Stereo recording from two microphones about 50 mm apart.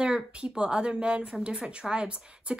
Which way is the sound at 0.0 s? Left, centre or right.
Centre.